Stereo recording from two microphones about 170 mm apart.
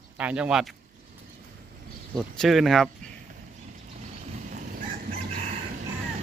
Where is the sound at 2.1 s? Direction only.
Centre (ahead or behind).